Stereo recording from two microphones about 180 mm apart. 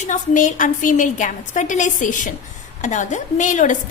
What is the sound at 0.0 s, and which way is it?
A woman's voice, 45° left (ahead or behind).